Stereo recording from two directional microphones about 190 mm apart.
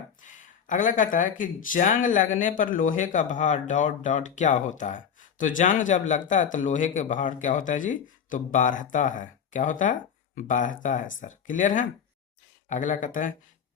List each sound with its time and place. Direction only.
0.2 s speech: 45° left (ahead or behind)